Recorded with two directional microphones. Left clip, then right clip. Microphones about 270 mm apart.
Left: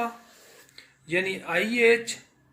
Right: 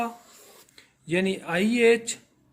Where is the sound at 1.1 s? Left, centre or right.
Right.